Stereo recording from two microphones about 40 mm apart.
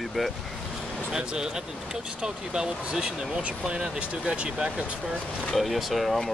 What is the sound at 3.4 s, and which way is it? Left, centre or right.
Speech, right.